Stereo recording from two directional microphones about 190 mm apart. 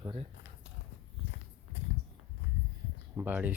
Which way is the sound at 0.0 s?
25° right (ahead or behind).